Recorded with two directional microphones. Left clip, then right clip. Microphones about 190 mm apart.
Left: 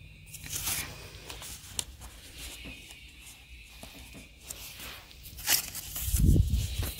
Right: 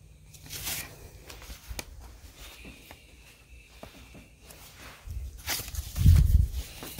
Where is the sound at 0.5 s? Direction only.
20° right (ahead or behind).